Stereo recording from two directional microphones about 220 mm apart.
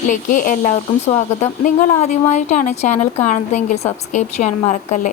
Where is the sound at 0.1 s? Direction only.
40° left (ahead or behind).